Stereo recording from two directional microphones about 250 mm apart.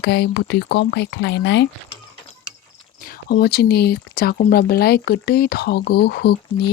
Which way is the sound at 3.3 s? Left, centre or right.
Left.